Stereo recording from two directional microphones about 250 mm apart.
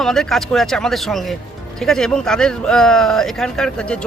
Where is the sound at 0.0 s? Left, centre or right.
Centre.